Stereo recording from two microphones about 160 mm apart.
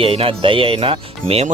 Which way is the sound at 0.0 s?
35° right (ahead or behind).